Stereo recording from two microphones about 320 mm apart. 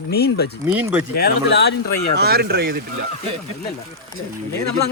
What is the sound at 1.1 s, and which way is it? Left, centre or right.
Speech, left.